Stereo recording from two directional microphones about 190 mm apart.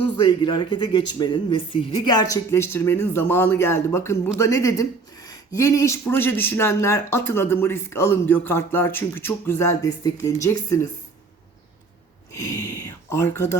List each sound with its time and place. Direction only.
0.0 s speech: 25° left (ahead or behind)
12.3 s speech: 15° left (ahead or behind)